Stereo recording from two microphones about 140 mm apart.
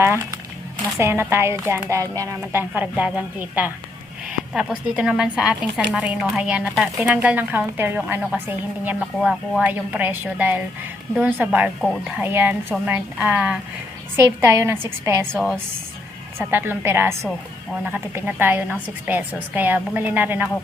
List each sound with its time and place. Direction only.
0.9 s a woman's voice: 15° right (ahead or behind)
16.4 s a woman's voice: 15° right (ahead or behind)